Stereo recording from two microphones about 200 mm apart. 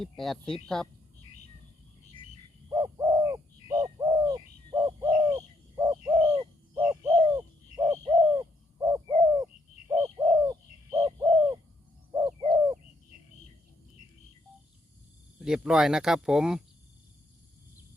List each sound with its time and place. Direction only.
0.0 s speech: centre (ahead or behind)
2.6 s bird: 20° right (ahead or behind)
15.4 s speech: 5° right (ahead or behind)